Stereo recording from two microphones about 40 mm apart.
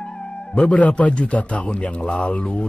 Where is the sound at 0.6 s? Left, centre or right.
Left.